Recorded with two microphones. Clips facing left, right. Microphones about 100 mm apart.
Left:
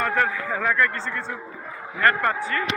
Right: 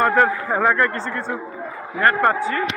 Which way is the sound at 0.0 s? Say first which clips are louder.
Right 6 dB; 40° right (ahead or behind).